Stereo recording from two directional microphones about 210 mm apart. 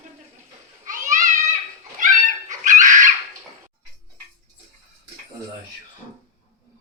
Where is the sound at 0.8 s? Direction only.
35° right (ahead or behind).